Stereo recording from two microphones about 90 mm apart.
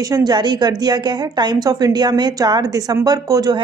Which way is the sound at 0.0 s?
45° right (ahead or behind).